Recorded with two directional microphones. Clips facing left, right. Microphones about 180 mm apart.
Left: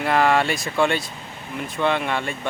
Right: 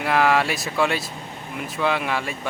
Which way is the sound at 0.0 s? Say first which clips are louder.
Left 1 dB; centre (ahead or behind).